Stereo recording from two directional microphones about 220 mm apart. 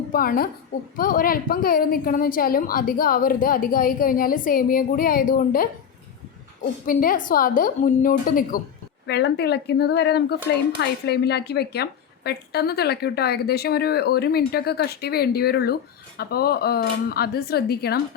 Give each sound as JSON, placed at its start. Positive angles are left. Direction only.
{"t": 0.1, "sound": "a woman's voice", "side_deg": 40}
{"t": 6.8, "sound": "a woman's voice", "side_deg": 40}